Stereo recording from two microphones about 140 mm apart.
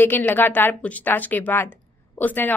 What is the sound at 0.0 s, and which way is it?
A woman's voice, 15° left (ahead or behind).